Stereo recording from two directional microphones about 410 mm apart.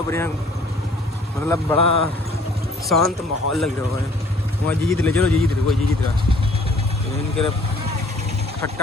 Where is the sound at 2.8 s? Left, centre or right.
Centre.